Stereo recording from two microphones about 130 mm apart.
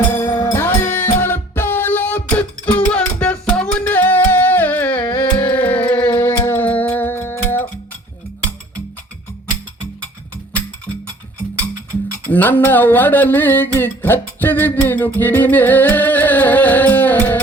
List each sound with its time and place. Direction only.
0.1 s music: 20° left (ahead or behind)
12.3 s mantra: 15° left (ahead or behind)